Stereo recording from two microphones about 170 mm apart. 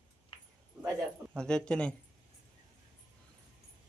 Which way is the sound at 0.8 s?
10° right (ahead or behind).